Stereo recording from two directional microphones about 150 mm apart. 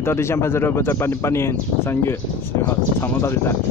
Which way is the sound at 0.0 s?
15° left (ahead or behind).